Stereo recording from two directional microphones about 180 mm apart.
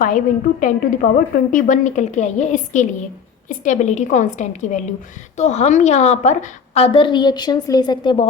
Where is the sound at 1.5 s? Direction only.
45° left (ahead or behind).